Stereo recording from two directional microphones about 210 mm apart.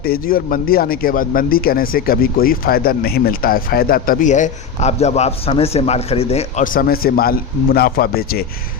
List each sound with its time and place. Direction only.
0.0 s speech: 45° left (ahead or behind)